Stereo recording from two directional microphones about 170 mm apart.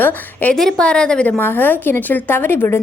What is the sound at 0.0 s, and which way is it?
A woman's voice, 10° left (ahead or behind).